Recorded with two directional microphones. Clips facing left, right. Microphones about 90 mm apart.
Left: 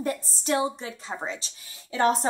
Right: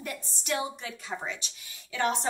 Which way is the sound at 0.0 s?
35° left (ahead or behind).